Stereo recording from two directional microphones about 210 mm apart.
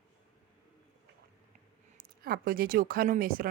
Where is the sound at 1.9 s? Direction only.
45° right (ahead or behind).